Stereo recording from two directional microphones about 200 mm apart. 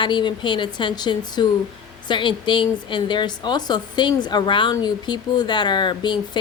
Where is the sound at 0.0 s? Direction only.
20° left (ahead or behind).